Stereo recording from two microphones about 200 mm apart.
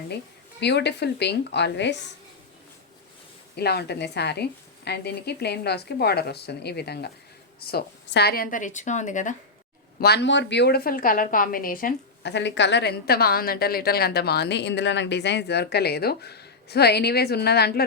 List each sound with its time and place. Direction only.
0.6 s speech: 60° left (ahead or behind)
3.5 s a woman's voice: 55° left (ahead or behind)
10.0 s a woman's voice: 55° left (ahead or behind)
12.3 s a woman's voice: 60° left (ahead or behind)